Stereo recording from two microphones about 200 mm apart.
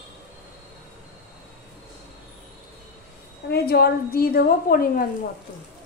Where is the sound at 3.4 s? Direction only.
50° left (ahead or behind).